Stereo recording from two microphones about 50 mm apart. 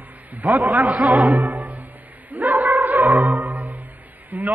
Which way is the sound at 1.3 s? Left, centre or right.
Right.